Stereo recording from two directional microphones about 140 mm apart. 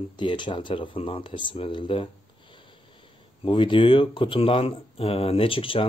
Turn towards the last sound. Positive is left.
turn(degrees=40)  # may be behind; listen again after turning